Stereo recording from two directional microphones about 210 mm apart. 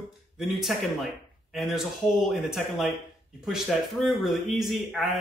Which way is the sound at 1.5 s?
Centre (ahead or behind).